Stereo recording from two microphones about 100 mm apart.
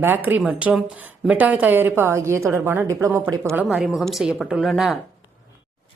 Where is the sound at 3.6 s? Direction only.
5° right (ahead or behind).